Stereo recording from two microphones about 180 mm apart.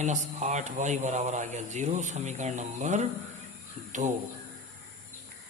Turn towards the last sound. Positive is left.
turn(degrees=-40)  # may be behind; listen again after turning